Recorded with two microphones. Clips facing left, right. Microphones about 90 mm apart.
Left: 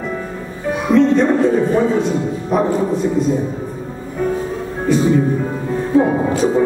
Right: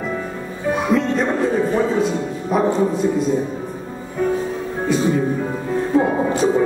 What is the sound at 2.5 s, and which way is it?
Speech, centre (ahead or behind).